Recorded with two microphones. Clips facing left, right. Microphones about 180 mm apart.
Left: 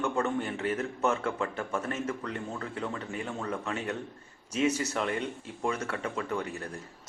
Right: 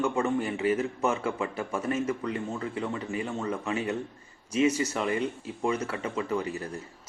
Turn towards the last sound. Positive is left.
turn(degrees=-5)  # may be behind; listen again after turning